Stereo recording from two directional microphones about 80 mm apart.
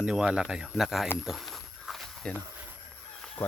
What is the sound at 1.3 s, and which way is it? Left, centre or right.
Walk, centre.